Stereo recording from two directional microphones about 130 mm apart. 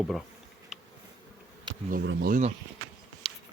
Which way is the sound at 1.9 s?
80° right.